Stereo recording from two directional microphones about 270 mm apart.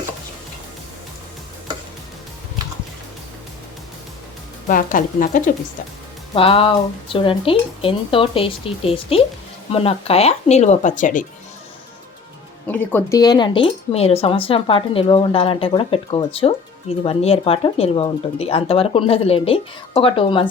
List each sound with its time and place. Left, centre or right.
4.7 s a woman's voice: left
6.3 s speech: centre
12.6 s speech: centre